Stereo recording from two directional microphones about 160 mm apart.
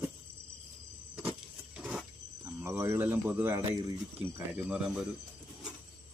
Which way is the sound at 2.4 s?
15° right (ahead or behind).